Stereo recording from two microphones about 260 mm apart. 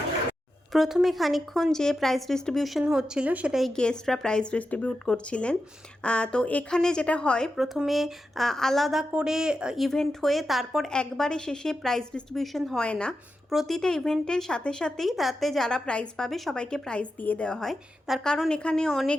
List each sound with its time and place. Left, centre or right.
0.7 s a woman's voice: centre